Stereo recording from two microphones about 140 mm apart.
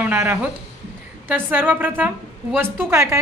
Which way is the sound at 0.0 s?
20° right (ahead or behind).